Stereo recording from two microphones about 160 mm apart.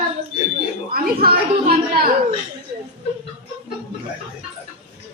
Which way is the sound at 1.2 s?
70° right (ahead or behind).